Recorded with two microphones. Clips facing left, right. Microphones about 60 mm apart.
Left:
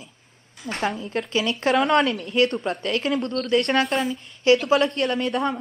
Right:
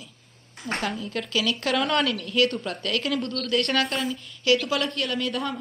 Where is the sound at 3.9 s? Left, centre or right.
Centre.